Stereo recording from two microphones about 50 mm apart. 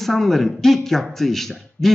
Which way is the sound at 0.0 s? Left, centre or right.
Centre.